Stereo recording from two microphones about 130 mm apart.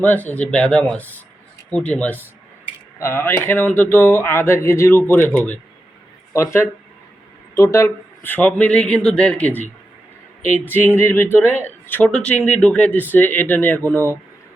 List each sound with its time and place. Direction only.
0.0 s speech: 15° left (ahead or behind)
6.3 s speech: 20° left (ahead or behind)
10.7 s speech: 15° left (ahead or behind)